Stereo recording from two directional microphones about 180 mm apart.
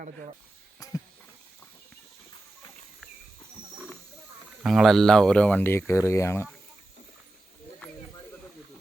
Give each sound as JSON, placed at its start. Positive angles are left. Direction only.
{"t": 4.6, "sound": "speech", "side_deg": 0}